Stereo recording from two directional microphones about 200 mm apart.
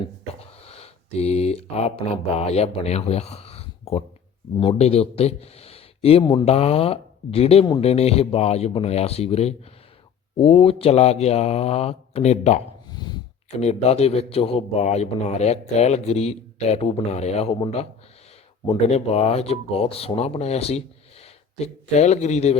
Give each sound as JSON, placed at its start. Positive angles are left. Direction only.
{"t": 0.6, "sound": "a sound", "side_deg": 30}
{"t": 2.5, "sound": "a man's voice", "side_deg": 30}
{"t": 12.9, "sound": "sneeze", "side_deg": 20}
{"t": 13.6, "sound": "a man's voice", "side_deg": 30}